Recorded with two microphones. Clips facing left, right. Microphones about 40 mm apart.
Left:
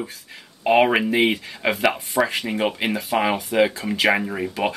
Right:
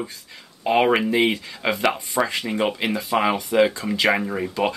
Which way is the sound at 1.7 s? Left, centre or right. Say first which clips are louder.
Left 1 dB; centre.